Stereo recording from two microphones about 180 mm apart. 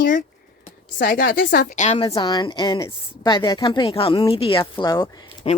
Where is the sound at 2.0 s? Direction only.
25° left (ahead or behind).